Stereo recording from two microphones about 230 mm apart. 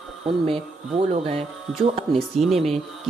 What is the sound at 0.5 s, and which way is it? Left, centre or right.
Speech, right.